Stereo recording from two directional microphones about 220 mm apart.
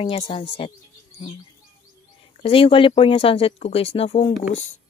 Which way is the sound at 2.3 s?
25° left (ahead or behind).